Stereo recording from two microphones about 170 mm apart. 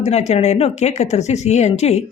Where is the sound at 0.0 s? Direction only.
40° left (ahead or behind).